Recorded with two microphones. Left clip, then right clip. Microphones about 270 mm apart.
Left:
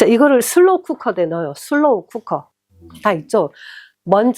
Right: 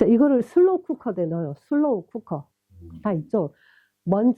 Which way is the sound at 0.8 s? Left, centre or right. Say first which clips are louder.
Left 8 dB; centre.